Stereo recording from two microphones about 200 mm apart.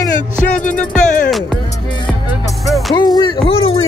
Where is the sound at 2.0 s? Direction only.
15° left (ahead or behind).